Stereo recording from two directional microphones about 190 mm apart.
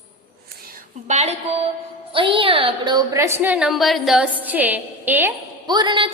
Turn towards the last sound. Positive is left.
turn(degrees=-25)  # may be behind; listen again after turning